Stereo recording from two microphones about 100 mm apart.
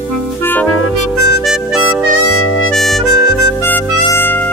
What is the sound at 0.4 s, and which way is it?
Music, 20° left (ahead or behind).